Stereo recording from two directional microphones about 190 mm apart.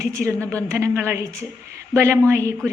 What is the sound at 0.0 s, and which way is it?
A woman's voice, 15° right (ahead or behind).